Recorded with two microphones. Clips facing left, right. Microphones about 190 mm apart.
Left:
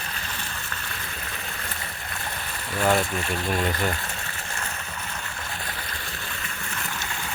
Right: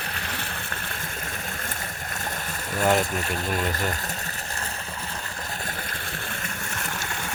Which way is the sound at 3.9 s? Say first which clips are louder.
Right 1 dB; 40° right (ahead or behind).